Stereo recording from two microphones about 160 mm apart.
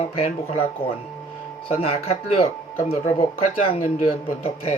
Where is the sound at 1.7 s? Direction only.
35° left (ahead or behind).